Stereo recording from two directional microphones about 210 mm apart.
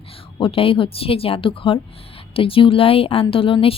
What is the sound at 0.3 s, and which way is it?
Speech, 25° left (ahead or behind).